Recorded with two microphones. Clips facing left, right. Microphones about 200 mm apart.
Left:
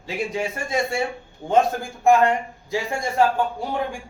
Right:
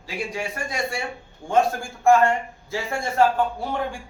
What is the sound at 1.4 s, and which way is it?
Speech, 35° left (ahead or behind).